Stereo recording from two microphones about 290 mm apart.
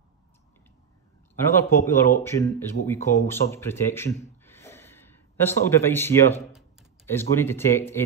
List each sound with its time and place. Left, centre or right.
1.4 s speech: centre